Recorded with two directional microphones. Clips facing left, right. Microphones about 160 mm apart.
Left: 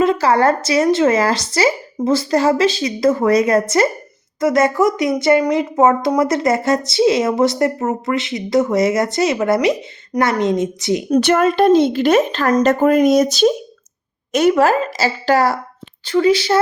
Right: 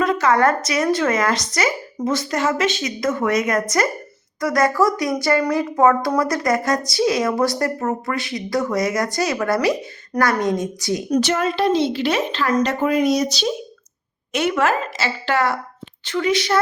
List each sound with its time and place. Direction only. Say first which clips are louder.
0.0 s speech: left 3 dB; 30° left (ahead or behind)
11.1 s a woman's voice: left 6 dB; 55° left (ahead or behind)
14.3 s speech: left 6 dB; 40° left (ahead or behind)